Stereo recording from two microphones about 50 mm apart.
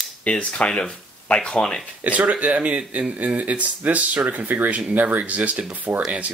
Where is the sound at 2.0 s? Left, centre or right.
Right.